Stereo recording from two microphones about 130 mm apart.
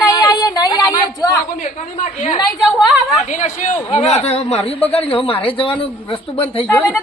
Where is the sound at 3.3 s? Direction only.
70° left (ahead or behind).